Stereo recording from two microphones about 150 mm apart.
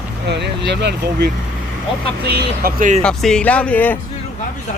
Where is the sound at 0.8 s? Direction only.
90° right.